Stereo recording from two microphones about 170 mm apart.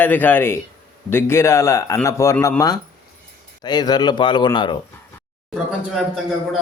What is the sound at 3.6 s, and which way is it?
Speech, 25° left (ahead or behind).